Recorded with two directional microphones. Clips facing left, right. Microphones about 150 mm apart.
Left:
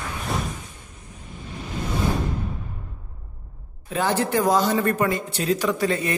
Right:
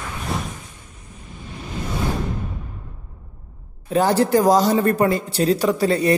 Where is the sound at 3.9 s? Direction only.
35° right (ahead or behind).